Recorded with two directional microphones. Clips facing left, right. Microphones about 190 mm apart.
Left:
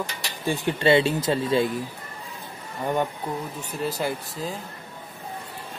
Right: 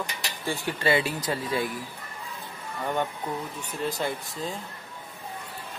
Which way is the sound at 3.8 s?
5° left (ahead or behind).